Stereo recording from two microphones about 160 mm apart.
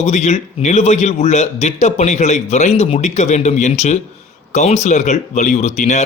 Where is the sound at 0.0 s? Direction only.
45° left (ahead or behind).